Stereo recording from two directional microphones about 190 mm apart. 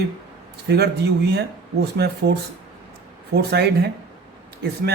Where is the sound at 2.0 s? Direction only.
60° right (ahead or behind).